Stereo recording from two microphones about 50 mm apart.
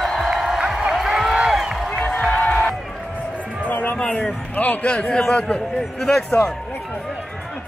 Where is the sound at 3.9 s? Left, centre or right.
Left.